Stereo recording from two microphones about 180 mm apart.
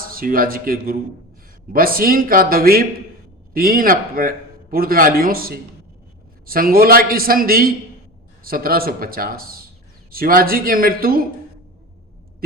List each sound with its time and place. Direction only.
0.0 s a man's voice: 55° right (ahead or behind)
12.4 s a man's voice: 55° right (ahead or behind)